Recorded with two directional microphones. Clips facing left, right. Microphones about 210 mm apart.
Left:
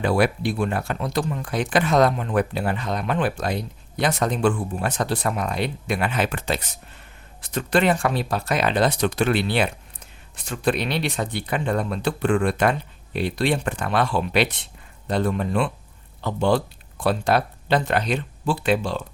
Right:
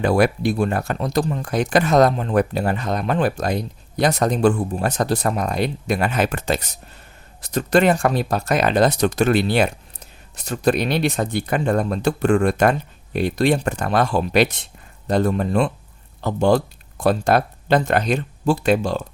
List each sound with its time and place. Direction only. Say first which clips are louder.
0.0 s speech: right 3 dB; 45° right (ahead or behind)